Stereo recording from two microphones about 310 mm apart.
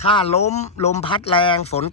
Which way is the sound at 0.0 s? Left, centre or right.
Centre.